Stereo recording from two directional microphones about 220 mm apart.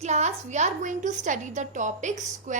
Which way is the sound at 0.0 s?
30° right (ahead or behind).